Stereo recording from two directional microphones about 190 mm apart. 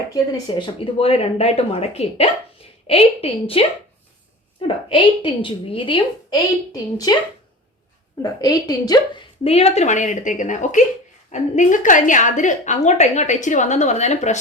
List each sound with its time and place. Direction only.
0.1 s a woman's voice: 20° left (ahead or behind)
0.9 s a woman's voice: 30° left (ahead or behind)
4.9 s a woman's voice: 25° left (ahead or behind)
8.2 s a woman's voice: 20° left (ahead or behind); by 14.3 s 35° left (ahead or behind)